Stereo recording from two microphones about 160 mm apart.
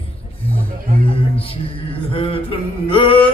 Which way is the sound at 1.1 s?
35° left (ahead or behind).